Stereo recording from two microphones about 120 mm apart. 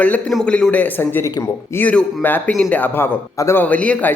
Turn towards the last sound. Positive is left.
turn(degrees=10)  # may be behind; listen again after turning